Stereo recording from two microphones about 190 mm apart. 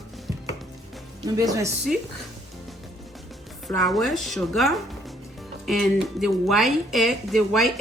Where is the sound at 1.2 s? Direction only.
20° right (ahead or behind).